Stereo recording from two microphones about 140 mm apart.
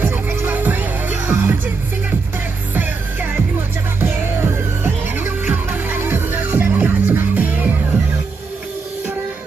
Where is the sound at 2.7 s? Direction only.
15° right (ahead or behind).